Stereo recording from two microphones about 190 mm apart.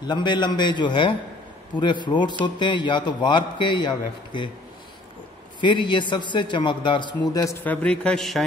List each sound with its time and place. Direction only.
0.0 s a man's voice: 25° left (ahead or behind)
5.6 s a man's voice: 25° left (ahead or behind)
7.6 s a man's voice: 10° left (ahead or behind)